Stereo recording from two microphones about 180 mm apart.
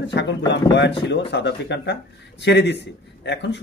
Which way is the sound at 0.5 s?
75° left (ahead or behind).